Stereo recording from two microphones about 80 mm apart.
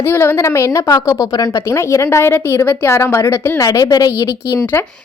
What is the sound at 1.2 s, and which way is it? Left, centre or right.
Speech, left.